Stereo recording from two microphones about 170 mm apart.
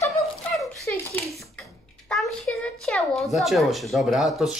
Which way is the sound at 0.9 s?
10° left (ahead or behind).